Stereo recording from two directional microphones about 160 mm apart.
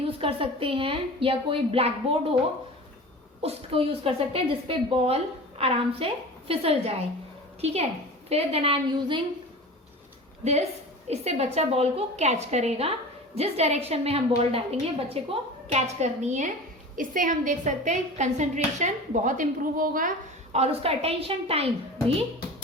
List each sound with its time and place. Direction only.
0.0 s a woman's voice: 35° right (ahead or behind)
3.4 s a woman's voice: 35° right (ahead or behind)
10.4 s a woman's voice: 45° right (ahead or behind); by 20.1 s 60° right (ahead or behind)
20.5 s a woman's voice: 40° right (ahead or behind)